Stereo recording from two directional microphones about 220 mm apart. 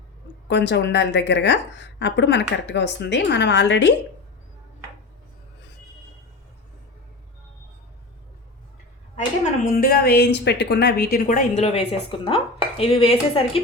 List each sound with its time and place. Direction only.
0.4 s a woman's voice: 50° left (ahead or behind)
9.1 s a woman's voice: 35° left (ahead or behind)